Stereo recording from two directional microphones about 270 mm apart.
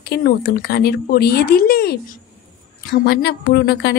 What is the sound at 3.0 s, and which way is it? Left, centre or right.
Speech, left.